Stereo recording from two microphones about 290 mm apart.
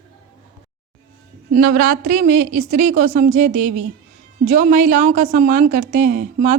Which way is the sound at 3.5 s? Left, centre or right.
Right.